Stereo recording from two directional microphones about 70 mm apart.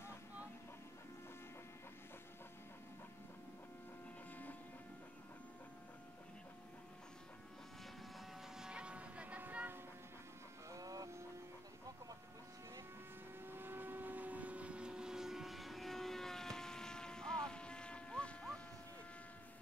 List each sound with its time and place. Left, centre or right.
8.5 s music: centre
10.7 s a sound: right
13.4 s vehicle: right; by 18.6 s centre